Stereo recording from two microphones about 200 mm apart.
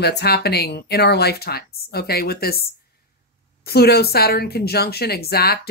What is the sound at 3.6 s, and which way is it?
Speech, 50° left (ahead or behind).